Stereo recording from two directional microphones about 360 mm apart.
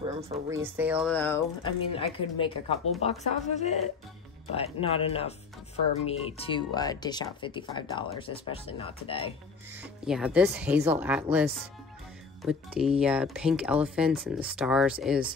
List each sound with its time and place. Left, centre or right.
0.0 s speech: centre
10.0 s speech: centre